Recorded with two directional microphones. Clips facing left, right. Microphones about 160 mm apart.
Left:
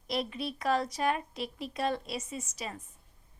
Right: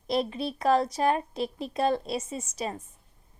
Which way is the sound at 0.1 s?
30° right (ahead or behind).